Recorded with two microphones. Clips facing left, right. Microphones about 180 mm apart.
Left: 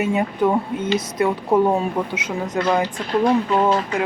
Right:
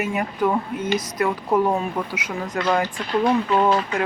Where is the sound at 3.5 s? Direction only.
15° left (ahead or behind).